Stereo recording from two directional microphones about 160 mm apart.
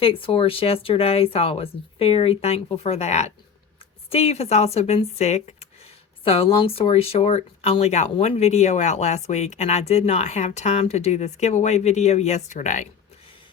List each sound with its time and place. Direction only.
0.0 s speech: 35° left (ahead or behind)